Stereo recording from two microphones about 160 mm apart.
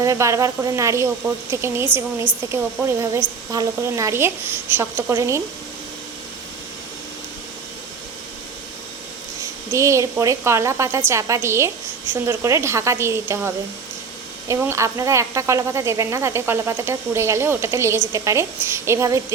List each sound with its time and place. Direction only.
0.0 s a woman's voice: 20° right (ahead or behind)
9.4 s a woman's voice: 20° right (ahead or behind)